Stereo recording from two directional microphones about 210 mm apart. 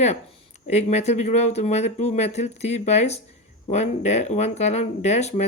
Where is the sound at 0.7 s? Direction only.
30° left (ahead or behind).